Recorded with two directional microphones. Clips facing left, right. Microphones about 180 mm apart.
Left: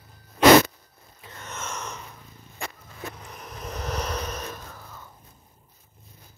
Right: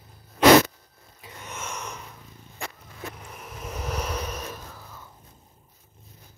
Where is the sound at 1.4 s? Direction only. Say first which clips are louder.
Left 1 dB; 10° right (ahead or behind).